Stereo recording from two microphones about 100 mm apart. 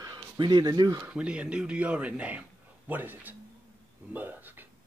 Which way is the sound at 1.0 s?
10° right (ahead or behind).